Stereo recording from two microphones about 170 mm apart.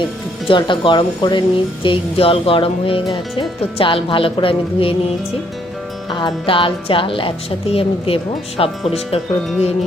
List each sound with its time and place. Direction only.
0.4 s speech: 30° left (ahead or behind)